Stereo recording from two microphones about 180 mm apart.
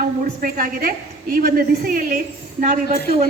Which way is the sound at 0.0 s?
50° right (ahead or behind).